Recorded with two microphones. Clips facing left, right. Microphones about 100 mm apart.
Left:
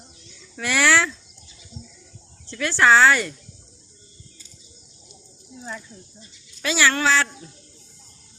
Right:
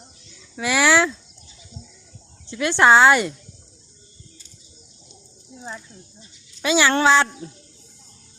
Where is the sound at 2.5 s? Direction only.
20° right (ahead or behind).